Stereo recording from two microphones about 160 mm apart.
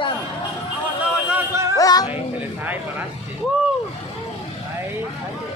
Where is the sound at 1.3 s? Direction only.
15° right (ahead or behind).